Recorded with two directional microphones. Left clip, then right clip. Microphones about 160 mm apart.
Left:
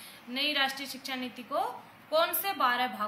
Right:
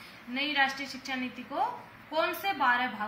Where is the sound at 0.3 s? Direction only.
20° left (ahead or behind).